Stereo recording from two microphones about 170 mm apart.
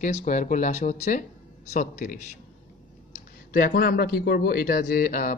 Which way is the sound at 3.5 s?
55° left (ahead or behind).